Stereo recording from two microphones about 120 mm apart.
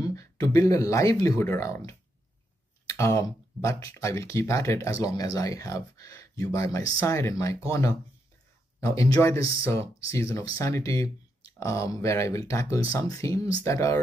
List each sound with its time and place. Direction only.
0.0 s speech: 30° left (ahead or behind)